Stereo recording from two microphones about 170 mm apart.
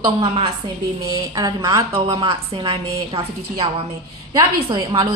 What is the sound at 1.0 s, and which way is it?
A woman's voice, 20° right (ahead or behind).